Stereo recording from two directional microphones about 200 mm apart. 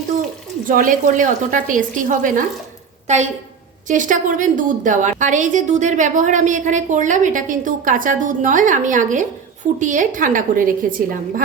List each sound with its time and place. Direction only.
0.7 s a woman's voice: 40° right (ahead or behind)